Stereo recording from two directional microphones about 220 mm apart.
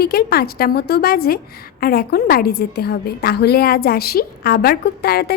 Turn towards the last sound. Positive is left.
turn(degrees=45)  # may be behind; listen again after turning